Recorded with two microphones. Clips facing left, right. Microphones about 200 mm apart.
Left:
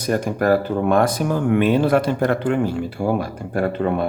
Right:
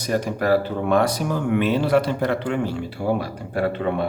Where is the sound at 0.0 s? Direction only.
50° left (ahead or behind).